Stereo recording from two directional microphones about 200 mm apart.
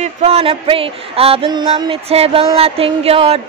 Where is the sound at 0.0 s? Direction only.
30° right (ahead or behind).